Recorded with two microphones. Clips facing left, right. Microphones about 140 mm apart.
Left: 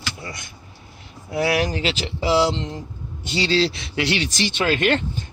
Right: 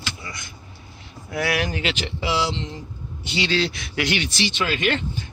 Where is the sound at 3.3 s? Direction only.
35° left (ahead or behind).